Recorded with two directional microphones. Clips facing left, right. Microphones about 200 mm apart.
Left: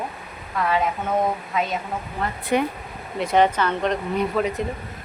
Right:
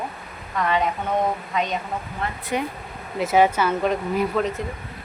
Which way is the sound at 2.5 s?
60° left (ahead or behind).